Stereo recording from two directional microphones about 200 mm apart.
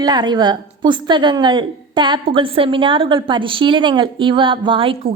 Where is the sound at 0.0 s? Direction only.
20° right (ahead or behind).